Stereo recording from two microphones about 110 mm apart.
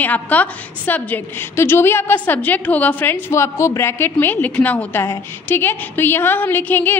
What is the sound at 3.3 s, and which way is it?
A woman's voice, 25° left (ahead or behind).